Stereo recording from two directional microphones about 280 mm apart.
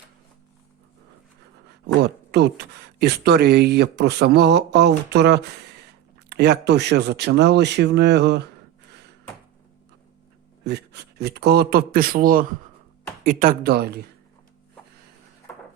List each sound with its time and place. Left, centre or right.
2.0 s speech: right
10.6 s speech: right